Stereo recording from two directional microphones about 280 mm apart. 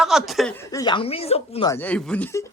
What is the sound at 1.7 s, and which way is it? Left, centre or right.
Speech, centre.